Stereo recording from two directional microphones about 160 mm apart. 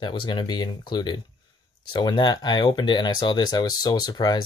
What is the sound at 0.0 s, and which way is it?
Speech, 30° left (ahead or behind).